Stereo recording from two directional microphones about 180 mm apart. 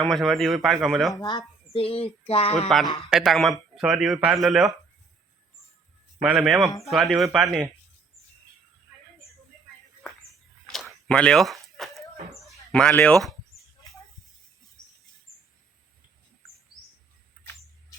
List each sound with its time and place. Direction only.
0.0 s speech: centre (ahead or behind)
1.1 s speech: 25° left (ahead or behind)
3.1 s speech: centre (ahead or behind)
6.2 s speech: 5° right (ahead or behind)
10.7 s a sound: centre (ahead or behind)
17.4 s a sound: 10° left (ahead or behind)